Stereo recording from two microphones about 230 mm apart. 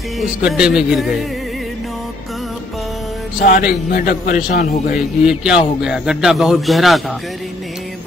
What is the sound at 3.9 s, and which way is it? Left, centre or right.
Speech, left.